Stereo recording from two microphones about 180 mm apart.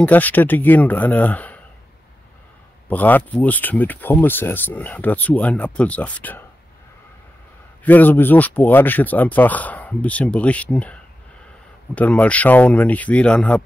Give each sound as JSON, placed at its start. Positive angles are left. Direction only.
{"t": 0.0, "sound": "speech", "side_deg": 10}
{"t": 2.9, "sound": "speech", "side_deg": 10}
{"t": 7.8, "sound": "speech", "side_deg": 10}